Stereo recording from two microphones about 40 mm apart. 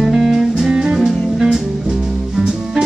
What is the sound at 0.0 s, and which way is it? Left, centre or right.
Music, centre.